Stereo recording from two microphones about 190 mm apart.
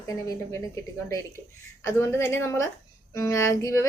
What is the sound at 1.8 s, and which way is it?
A woman's voice, 15° left (ahead or behind).